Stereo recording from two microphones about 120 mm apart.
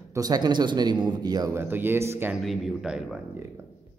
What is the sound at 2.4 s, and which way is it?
Speech, 5° right (ahead or behind).